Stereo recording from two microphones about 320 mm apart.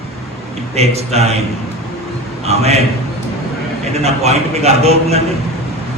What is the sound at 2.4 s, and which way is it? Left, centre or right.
Speech, centre.